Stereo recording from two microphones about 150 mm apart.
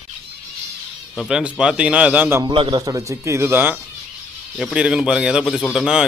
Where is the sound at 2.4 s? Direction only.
30° right (ahead or behind); by 3.8 s 15° right (ahead or behind).